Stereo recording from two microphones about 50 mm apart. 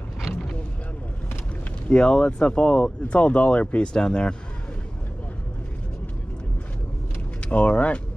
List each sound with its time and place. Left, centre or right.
0.3 s vehicle: centre
1.9 s speech: centre
7.4 s speech: left